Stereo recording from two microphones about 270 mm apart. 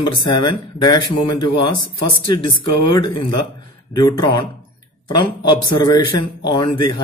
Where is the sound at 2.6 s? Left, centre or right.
Left.